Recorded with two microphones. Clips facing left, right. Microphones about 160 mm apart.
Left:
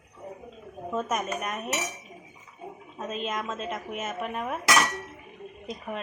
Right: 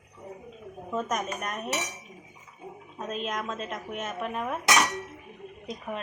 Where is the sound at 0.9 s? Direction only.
5° left (ahead or behind).